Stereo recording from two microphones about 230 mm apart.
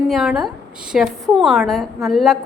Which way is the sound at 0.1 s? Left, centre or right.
Centre.